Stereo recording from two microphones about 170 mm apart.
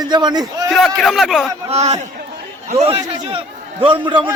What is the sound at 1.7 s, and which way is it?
Speech, 40° right (ahead or behind).